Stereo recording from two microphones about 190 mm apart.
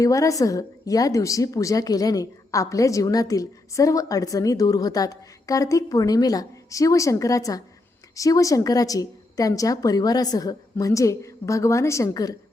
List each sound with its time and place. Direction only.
0.0 s a woman's voice: 15° left (ahead or behind)